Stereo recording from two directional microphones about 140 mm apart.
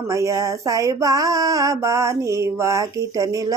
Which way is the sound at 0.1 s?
20° right (ahead or behind).